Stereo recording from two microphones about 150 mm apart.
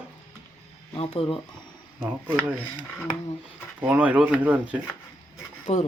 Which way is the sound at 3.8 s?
10° right (ahead or behind).